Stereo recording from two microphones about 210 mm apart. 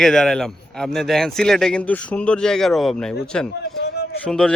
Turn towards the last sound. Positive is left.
turn(degrees=5)  # may be behind; listen again after turning